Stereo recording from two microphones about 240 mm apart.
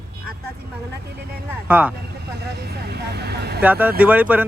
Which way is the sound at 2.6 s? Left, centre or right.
Right.